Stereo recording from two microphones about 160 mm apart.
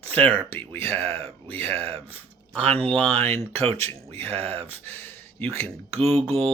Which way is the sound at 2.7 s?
35° right (ahead or behind).